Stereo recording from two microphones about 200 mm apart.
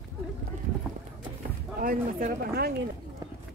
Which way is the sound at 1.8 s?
45° right (ahead or behind).